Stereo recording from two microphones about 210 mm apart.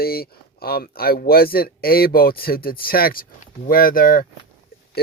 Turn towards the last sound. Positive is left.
turn(degrees=40)  # may be behind; listen again after turning